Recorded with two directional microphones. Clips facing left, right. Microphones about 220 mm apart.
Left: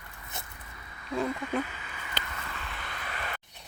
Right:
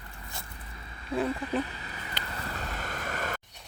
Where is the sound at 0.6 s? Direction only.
30° right (ahead or behind).